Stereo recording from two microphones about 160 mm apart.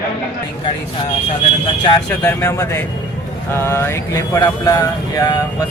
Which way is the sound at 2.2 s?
15° left (ahead or behind).